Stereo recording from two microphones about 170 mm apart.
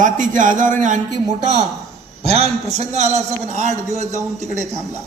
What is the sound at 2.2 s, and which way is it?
A man's voice, 40° right (ahead or behind).